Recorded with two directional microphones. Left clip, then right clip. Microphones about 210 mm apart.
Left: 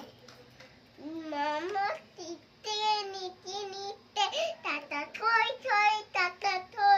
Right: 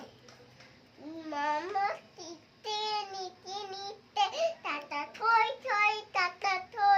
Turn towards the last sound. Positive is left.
turn(degrees=-5)  # may be behind; listen again after turning